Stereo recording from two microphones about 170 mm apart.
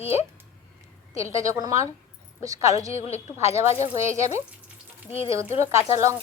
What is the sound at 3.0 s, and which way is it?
Speech, 40° left (ahead or behind).